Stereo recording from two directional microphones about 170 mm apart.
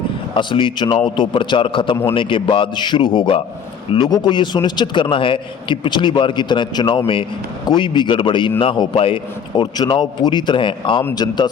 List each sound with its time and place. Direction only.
0.3 s a man's voice: 30° left (ahead or behind)